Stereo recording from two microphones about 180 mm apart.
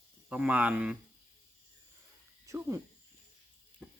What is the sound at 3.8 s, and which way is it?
Frying, 5° right (ahead or behind).